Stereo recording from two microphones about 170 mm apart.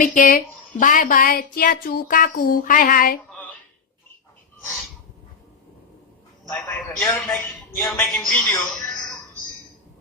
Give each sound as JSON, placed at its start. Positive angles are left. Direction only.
{"t": 0.0, "sound": "speech", "side_deg": 50}
{"t": 6.5, "sound": "a man's voice", "side_deg": 10}